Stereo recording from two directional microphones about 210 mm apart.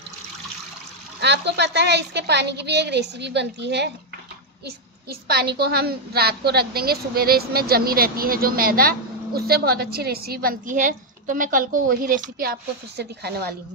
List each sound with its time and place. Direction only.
1.2 s a woman's voice: 55° right (ahead or behind)
5.3 s a woman's voice: 50° right (ahead or behind)